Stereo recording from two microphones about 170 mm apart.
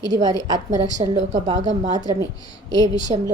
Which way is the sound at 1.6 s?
45° right (ahead or behind).